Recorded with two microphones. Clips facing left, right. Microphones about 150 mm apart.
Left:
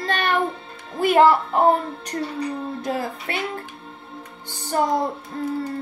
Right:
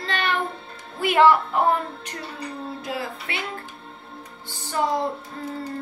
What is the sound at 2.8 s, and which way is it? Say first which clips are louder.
Speech: left 5 dB; 45° left (ahead or behind).